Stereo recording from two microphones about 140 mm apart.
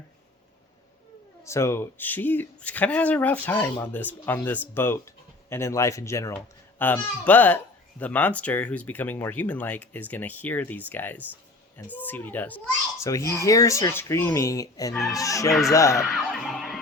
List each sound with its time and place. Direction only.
1.5 s a child's voice: 20° left (ahead or behind)
13.1 s speech: 20° left (ahead or behind)
16.0 s a sound: centre (ahead or behind)